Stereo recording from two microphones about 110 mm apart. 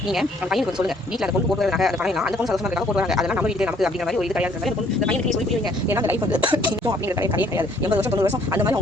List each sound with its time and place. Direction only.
0.1 s speech: 5° right (ahead or behind)
5.9 s speech: 20° right (ahead or behind)
6.4 s speech: 50° right (ahead or behind)
7.2 s speech: 20° right (ahead or behind)